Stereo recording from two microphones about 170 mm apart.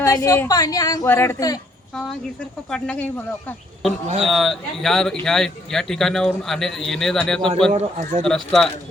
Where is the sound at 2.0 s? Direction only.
5° left (ahead or behind).